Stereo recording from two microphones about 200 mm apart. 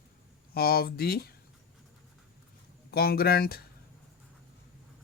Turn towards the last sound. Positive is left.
turn(degrees=50)  # may be behind; listen again after turning